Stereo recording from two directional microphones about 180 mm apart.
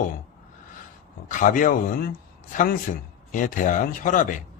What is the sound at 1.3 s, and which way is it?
Speech, 45° left (ahead or behind).